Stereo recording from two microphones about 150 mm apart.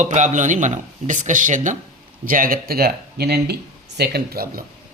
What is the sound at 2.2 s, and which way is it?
Speech, 70° right (ahead or behind).